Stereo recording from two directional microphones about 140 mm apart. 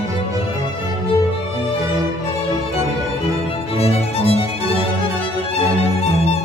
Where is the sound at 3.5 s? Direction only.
45° left (ahead or behind).